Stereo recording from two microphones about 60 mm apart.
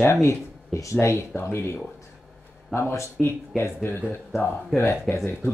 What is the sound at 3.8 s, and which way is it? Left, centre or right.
Speech, left.